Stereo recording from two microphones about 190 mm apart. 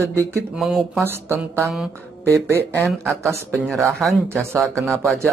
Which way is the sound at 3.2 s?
15° right (ahead or behind).